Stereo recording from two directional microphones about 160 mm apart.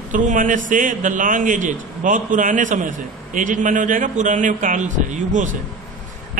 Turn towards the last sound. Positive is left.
turn(degrees=-50)  # may be behind; listen again after turning